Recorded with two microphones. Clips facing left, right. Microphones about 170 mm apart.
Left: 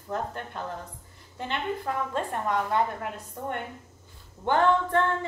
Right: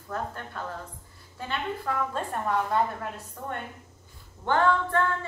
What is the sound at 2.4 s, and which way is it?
Speech, 15° left (ahead or behind).